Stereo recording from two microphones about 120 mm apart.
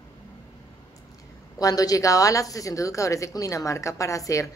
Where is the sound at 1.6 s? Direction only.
30° left (ahead or behind).